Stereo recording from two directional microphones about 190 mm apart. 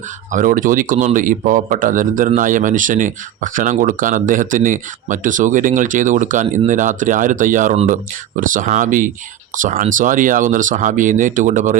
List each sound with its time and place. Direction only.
0.3 s speech: 45° right (ahead or behind)